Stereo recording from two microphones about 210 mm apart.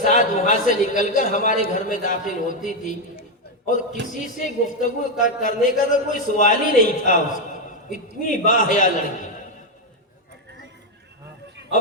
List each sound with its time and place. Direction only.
0.0 s a man's voice: 35° left (ahead or behind)